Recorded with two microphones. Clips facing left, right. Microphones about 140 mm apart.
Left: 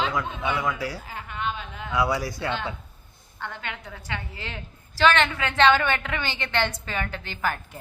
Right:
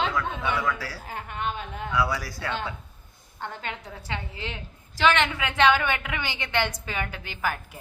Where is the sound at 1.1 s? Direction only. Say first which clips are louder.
Even; 50° right (ahead or behind).